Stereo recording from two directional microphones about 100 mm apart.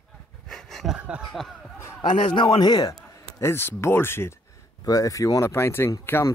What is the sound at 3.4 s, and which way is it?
Speech, 25° left (ahead or behind).